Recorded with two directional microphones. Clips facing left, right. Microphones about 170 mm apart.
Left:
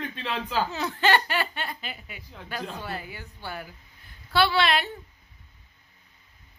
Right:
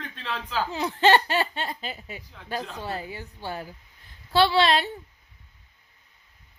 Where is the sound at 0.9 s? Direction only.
25° right (ahead or behind).